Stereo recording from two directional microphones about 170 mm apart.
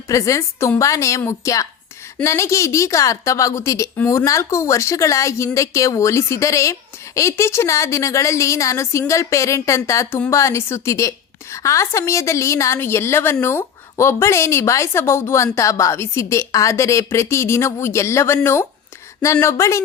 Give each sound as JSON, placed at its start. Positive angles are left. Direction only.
{"t": 0.1, "sound": "a woman's voice", "side_deg": 20}